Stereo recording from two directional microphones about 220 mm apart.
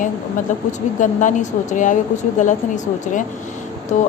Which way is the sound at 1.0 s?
35° left (ahead or behind).